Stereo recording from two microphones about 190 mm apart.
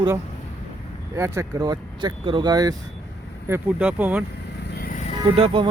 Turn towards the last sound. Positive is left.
turn(degrees=-25)  # may be behind; listen again after turning